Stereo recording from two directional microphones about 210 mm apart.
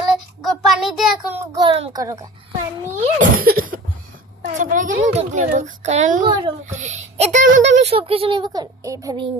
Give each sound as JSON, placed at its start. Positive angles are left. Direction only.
{"t": 0.4, "sound": "child singing", "side_deg": 0}
{"t": 1.5, "sound": "a child's voice", "side_deg": -25}
{"t": 3.2, "sound": "a child's voice", "side_deg": -45}
{"t": 6.2, "sound": "a child's voice", "side_deg": -20}
{"t": 6.7, "sound": "a child's voice", "side_deg": -35}
{"t": 7.5, "sound": "speech", "side_deg": -60}
{"t": 7.8, "sound": "a child's voice", "side_deg": -30}